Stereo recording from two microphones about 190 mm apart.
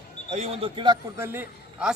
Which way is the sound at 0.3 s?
30° right (ahead or behind).